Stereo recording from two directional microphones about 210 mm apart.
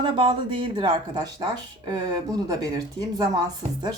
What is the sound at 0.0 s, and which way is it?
Speech, 25° right (ahead or behind).